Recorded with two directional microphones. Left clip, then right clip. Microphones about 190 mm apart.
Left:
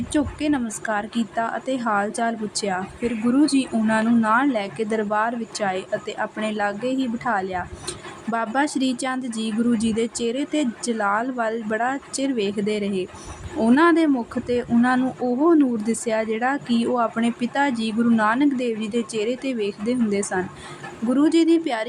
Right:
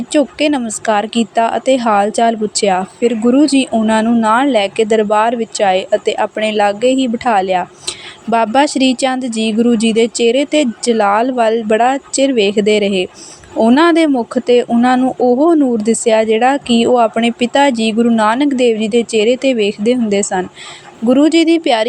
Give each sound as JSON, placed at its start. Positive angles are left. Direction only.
{"t": 0.1, "sound": "a woman's voice", "side_deg": -30}